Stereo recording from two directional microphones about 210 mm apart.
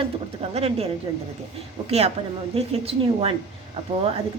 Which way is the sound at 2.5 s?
30° right (ahead or behind).